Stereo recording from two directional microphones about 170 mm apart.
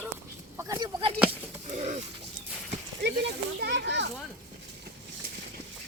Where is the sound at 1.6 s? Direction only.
45° right (ahead or behind).